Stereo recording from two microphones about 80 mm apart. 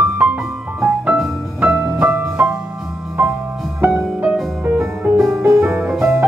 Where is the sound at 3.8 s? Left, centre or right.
Centre.